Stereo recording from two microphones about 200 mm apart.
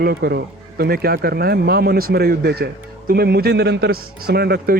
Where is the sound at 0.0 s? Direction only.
50° right (ahead or behind).